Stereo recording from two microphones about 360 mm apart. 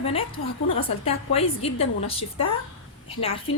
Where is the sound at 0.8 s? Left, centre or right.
Centre.